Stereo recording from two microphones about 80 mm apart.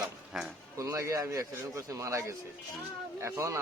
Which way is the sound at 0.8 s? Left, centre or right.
Right.